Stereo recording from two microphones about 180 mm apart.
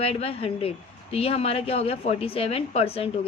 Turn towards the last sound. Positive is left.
turn(degrees=35)  # may be behind; listen again after turning